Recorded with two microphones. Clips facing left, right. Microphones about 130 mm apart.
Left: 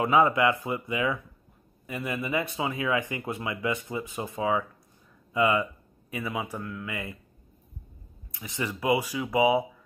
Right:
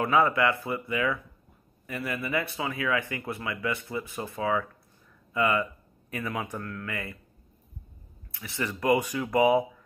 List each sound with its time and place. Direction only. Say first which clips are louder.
0.0 s a man's voice: left 2 dB; 15° left (ahead or behind)
8.3 s speech: even; 15° left (ahead or behind)